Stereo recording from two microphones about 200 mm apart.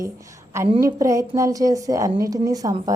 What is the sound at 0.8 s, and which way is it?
A woman's voice, 15° right (ahead or behind).